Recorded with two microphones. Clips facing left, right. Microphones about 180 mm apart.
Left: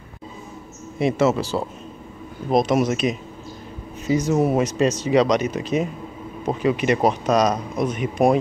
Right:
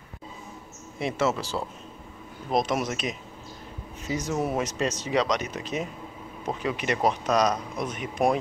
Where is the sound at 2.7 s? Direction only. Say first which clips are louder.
Left 9 dB; 20° left (ahead or behind).